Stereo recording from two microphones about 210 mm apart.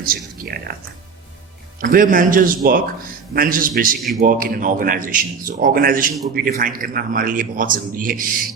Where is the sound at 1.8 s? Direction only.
40° right (ahead or behind).